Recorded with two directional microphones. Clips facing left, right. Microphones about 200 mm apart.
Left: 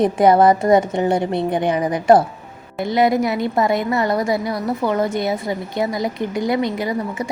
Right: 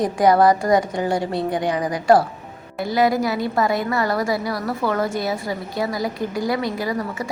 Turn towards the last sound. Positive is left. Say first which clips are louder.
# left 2 dB
turn(degrees=20)  # may be behind; listen again after turning